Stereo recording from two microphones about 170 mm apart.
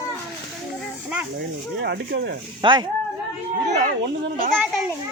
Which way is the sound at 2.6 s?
25° right (ahead or behind).